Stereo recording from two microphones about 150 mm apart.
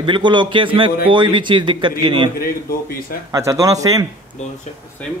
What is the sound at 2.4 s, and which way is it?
Speech, 75° left (ahead or behind).